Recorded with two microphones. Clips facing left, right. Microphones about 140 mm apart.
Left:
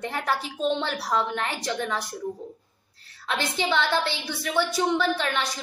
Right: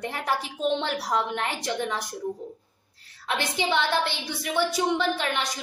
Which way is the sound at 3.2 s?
15° right (ahead or behind).